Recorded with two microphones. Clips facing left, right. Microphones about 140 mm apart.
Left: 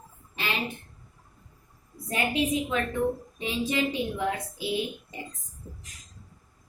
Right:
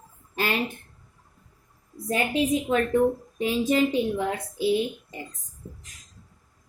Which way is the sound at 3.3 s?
40° right (ahead or behind).